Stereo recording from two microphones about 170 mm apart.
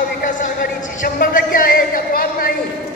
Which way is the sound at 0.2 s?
50° left (ahead or behind).